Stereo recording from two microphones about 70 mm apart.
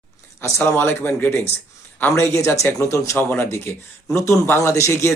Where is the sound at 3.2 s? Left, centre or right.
Left.